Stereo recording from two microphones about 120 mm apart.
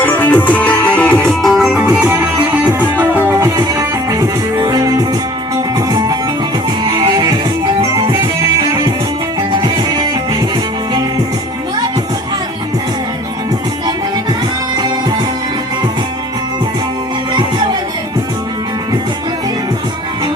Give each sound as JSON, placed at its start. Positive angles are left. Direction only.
{"t": 0.0, "sound": "music", "side_deg": 15}
{"t": 1.8, "sound": "music", "side_deg": -15}
{"t": 3.3, "sound": "music", "side_deg": -30}
{"t": 9.6, "sound": "music", "side_deg": -35}